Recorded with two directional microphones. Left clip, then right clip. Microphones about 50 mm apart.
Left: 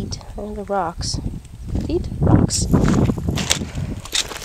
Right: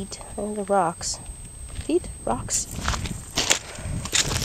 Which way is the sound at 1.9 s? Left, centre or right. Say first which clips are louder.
Left 4 dB; left.